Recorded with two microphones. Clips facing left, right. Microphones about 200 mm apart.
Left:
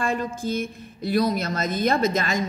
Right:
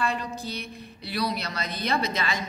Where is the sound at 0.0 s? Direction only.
50° left (ahead or behind).